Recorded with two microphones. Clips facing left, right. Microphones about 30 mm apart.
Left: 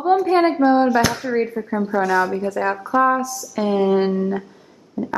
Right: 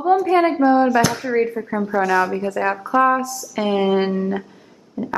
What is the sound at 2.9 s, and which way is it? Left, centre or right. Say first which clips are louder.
A woman's voice: right 1 dB; centre.